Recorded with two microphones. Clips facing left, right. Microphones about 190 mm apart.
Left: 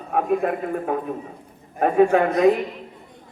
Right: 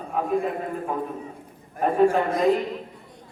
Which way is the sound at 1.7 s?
65° left (ahead or behind).